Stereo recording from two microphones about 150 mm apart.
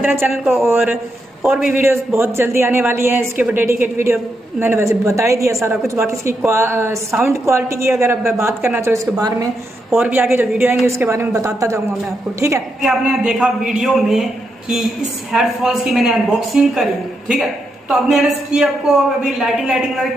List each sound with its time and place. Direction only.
0.0 s a woman's voice: 15° right (ahead or behind)
12.8 s a man's voice: 5° right (ahead or behind)
15.3 s a man's voice: centre (ahead or behind)